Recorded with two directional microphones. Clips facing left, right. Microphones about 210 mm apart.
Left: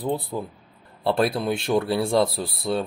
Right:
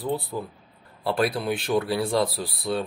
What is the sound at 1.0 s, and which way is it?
Speech, 25° left (ahead or behind).